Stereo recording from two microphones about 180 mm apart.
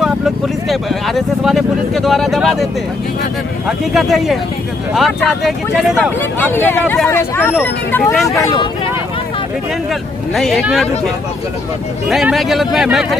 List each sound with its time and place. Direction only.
0.0 s speech: centre (ahead or behind)
8.3 s speech: 20° left (ahead or behind)
10.3 s speech: centre (ahead or behind)
12.1 s speech: centre (ahead or behind)